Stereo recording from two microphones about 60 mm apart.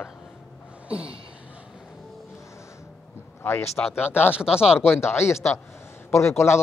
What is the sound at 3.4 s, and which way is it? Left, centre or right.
Speech, left.